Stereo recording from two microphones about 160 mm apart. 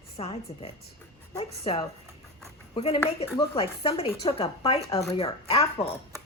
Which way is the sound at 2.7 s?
35° left (ahead or behind).